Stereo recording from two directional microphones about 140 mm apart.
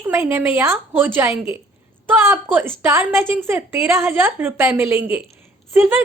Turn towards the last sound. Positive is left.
turn(degrees=-15)  # may be behind; listen again after turning